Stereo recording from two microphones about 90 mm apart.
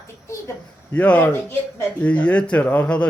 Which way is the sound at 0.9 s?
15° left (ahead or behind).